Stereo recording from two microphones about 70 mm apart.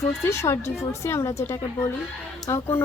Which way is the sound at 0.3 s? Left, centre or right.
Left.